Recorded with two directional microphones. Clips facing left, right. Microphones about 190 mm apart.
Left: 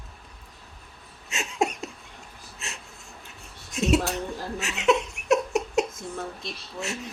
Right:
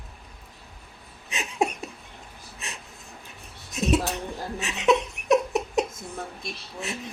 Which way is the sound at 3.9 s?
20° right (ahead or behind).